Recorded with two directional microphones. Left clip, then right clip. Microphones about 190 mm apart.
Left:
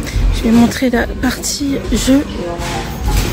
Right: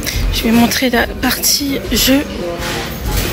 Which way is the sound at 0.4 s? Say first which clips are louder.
Even; 20° left (ahead or behind).